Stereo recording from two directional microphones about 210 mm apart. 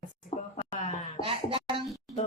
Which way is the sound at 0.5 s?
35° left (ahead or behind).